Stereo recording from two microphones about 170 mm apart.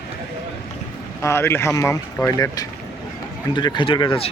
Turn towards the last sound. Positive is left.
turn(degrees=30)  # may be behind; listen again after turning